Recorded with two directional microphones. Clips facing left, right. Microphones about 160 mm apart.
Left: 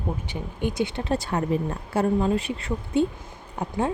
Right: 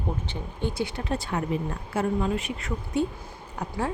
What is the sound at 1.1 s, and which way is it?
A woman's voice, 35° left (ahead or behind).